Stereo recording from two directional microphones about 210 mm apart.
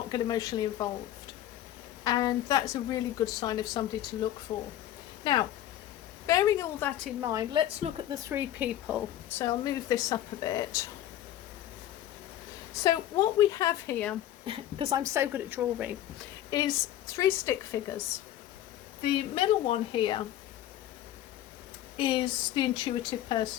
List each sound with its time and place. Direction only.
0.1 s speech: 15° left (ahead or behind)
2.0 s a woman's voice: 20° left (ahead or behind)
7.2 s a woman's voice: 15° right (ahead or behind)
8.1 s speech: 15° right (ahead or behind)
9.4 s a woman's voice: 15° left (ahead or behind)
12.8 s a woman's voice: 15° left (ahead or behind)
14.4 s speech: 25° right (ahead or behind); by 16.0 s 10° right (ahead or behind)
16.5 s a woman's voice: 20° left (ahead or behind)
19.0 s speech: 25° left (ahead or behind)
21.9 s speech: 25° left (ahead or behind)